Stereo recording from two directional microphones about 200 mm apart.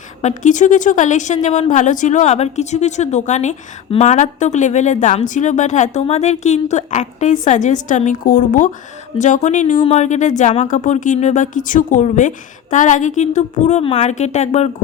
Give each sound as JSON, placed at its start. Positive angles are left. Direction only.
{"t": 0.2, "sound": "a woman's voice", "side_deg": 35}